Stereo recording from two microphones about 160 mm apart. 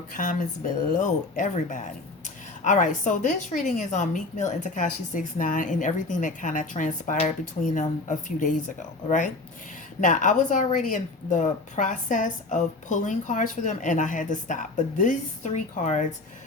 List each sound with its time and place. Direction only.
0.2 s a woman's voice: 50° left (ahead or behind)